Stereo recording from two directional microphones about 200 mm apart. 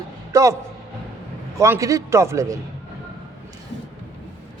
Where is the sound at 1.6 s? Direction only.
15° right (ahead or behind).